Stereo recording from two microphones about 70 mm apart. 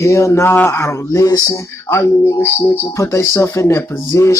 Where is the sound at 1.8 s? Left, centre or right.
Left.